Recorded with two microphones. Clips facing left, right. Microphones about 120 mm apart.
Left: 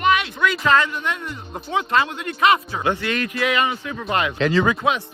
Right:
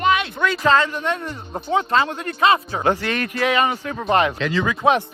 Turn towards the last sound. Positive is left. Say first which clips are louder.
# left 3 dB
turn(degrees=40)  # may be behind; listen again after turning